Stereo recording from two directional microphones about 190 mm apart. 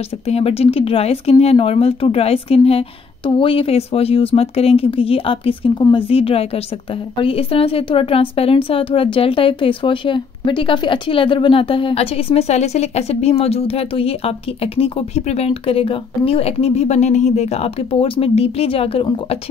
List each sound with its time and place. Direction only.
0.3 s a woman's voice: 30° left (ahead or behind)